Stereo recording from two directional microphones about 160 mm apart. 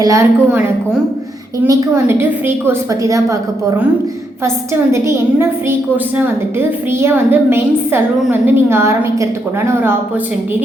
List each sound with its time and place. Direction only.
0.0 s a woman's voice: 20° right (ahead or behind)
1.6 s a woman's voice: 15° right (ahead or behind)